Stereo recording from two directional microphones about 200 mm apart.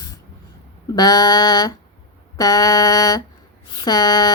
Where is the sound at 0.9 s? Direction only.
20° left (ahead or behind).